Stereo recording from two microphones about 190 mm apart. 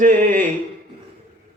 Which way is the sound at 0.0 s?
40° right (ahead or behind).